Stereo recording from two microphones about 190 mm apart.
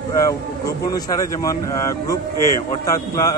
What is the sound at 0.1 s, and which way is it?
Speech, 20° left (ahead or behind).